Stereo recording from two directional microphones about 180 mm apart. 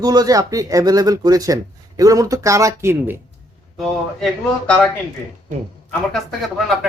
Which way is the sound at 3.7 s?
Centre (ahead or behind).